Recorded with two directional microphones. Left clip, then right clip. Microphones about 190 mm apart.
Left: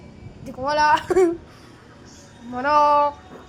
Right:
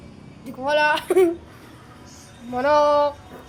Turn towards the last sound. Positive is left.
turn(degrees=-20)  # may be behind; listen again after turning